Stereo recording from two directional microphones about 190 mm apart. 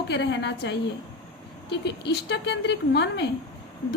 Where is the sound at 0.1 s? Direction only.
65° left (ahead or behind).